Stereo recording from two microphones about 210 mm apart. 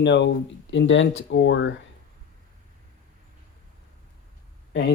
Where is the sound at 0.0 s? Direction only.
55° left (ahead or behind).